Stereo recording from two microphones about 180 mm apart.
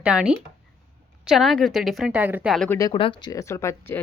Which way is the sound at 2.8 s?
25° left (ahead or behind).